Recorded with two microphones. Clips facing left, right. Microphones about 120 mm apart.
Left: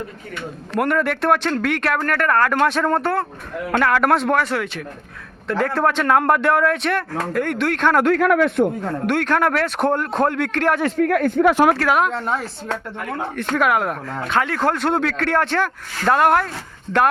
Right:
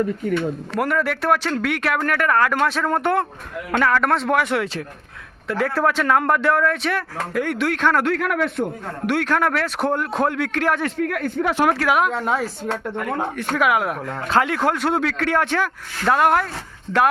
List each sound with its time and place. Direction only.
0.8 s speech: 5° right (ahead or behind)
2.9 s speech: 20° right (ahead or behind)
3.7 s speech: 5° left (ahead or behind)
4.3 s speech: 10° right (ahead or behind)
8.0 s speech: 45° left (ahead or behind)
9.0 s speech: 5° right (ahead or behind)
10.8 s speech: 45° left (ahead or behind)
11.8 s speech: 10° right (ahead or behind)